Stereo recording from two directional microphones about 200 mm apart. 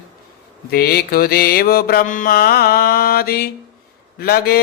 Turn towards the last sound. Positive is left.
turn(degrees=50)  # may be behind; listen again after turning